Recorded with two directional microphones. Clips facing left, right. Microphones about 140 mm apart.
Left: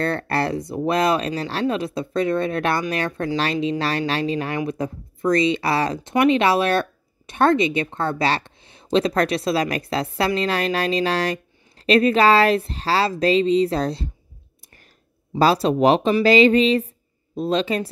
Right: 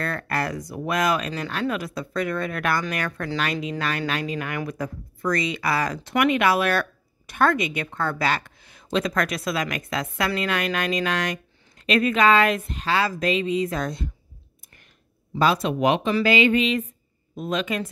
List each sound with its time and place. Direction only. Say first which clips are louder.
0.0 s speech: left 5 dB; 30° left (ahead or behind)
15.3 s speech: left 4 dB; 35° left (ahead or behind)